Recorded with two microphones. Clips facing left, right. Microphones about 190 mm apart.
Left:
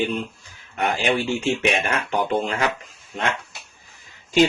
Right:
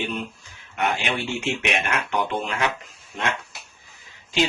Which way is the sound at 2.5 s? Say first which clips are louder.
Left 2 dB; 35° left (ahead or behind).